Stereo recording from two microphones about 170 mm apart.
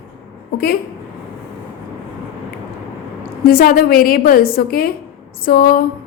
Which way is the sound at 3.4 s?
60° left (ahead or behind).